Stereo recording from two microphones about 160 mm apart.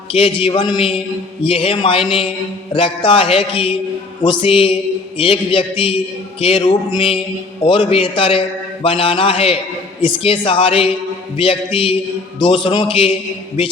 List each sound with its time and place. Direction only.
0.1 s speech: 35° left (ahead or behind)